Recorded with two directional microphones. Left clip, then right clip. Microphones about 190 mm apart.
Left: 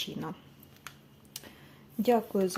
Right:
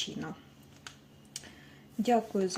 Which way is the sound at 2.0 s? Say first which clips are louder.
Left 2 dB; 15° left (ahead or behind).